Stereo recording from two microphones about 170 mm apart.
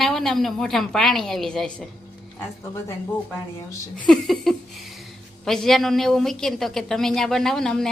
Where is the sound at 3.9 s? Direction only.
5° left (ahead or behind).